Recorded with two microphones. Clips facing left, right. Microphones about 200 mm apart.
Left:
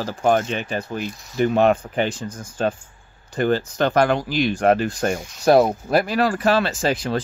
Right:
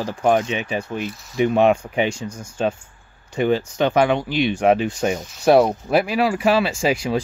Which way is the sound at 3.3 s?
Centre (ahead or behind).